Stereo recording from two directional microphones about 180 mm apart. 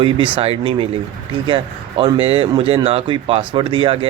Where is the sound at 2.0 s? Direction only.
30° right (ahead or behind).